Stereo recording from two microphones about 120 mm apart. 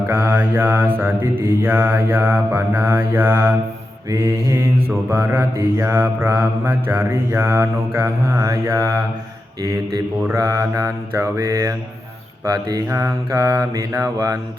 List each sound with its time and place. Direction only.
0.1 s mantra: 20° right (ahead or behind)
10.2 s mantra: 25° right (ahead or behind)